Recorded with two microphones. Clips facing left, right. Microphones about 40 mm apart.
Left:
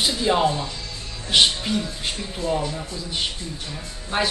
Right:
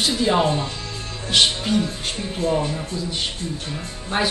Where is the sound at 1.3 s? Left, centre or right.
Centre.